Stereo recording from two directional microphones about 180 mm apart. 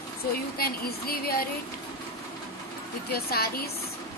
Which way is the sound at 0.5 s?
55° left (ahead or behind).